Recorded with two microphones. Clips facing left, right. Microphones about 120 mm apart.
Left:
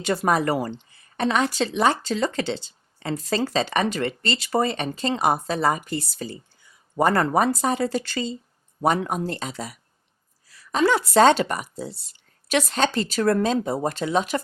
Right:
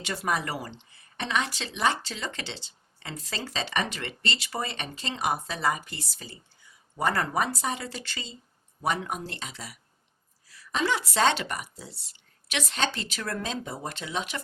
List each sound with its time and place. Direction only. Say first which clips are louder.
0.0 s speech: left 8 dB; 40° left (ahead or behind)